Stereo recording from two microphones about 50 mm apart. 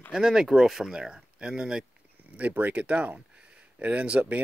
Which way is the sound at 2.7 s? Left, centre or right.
Right.